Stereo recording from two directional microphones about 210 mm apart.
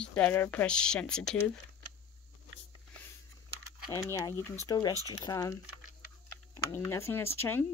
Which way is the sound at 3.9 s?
15° left (ahead or behind).